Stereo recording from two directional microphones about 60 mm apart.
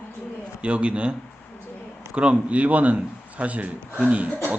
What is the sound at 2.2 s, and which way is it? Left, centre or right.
A man's voice, centre.